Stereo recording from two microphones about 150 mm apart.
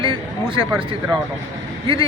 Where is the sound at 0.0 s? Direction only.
35° right (ahead or behind).